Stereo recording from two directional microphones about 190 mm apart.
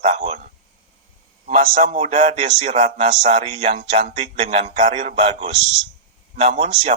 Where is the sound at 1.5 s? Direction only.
45° right (ahead or behind).